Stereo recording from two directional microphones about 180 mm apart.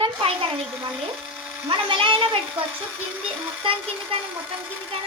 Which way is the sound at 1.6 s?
30° right (ahead or behind).